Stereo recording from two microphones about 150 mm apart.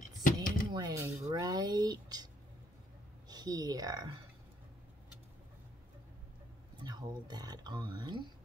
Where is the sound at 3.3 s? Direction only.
25° right (ahead or behind).